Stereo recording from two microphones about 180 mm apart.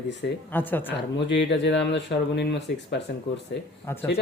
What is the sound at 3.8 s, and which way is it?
Speech, 15° left (ahead or behind).